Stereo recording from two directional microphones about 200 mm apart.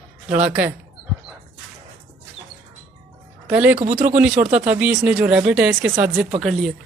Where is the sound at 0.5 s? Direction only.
5° right (ahead or behind).